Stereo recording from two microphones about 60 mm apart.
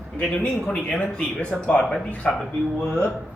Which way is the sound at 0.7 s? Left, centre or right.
Left.